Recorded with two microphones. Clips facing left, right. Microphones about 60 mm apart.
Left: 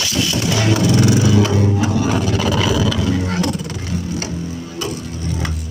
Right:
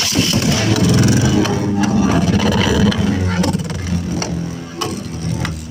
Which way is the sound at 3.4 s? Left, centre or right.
Right.